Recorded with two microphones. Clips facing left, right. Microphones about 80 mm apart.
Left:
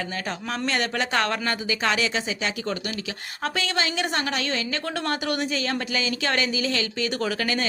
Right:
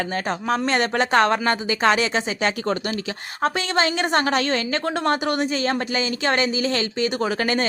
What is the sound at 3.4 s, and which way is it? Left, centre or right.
Speech, right.